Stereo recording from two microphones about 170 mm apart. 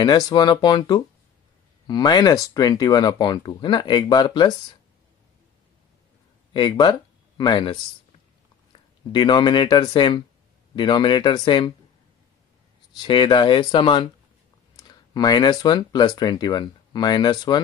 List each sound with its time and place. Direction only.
0.0 s speech: 25° left (ahead or behind)
6.5 s speech: 25° left (ahead or behind)
12.9 s speech: 25° left (ahead or behind)